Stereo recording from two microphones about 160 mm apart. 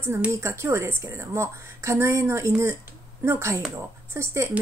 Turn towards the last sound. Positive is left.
turn(degrees=-15)  # may be behind; listen again after turning